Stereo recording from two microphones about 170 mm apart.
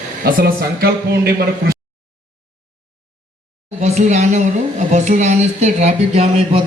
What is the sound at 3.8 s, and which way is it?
Speech, 40° right (ahead or behind).